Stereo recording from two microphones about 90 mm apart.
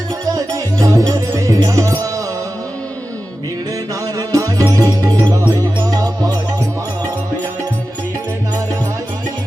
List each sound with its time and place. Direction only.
0.3 s music: 40° right (ahead or behind)
4.3 s music: 40° right (ahead or behind)